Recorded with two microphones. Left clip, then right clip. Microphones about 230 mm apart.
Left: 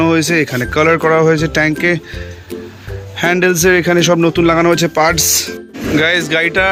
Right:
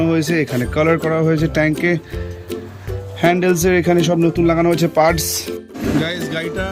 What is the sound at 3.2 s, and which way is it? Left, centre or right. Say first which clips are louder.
Speech: left 3 dB; centre.